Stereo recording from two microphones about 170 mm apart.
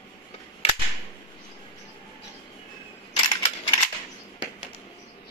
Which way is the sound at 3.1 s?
25° left (ahead or behind).